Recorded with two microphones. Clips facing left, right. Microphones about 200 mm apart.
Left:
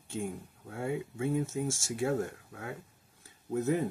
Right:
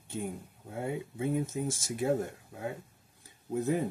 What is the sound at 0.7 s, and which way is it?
Speech, 20° right (ahead or behind).